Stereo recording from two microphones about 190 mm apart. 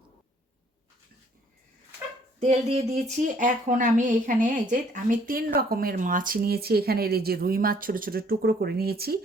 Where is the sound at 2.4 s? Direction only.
35° right (ahead or behind).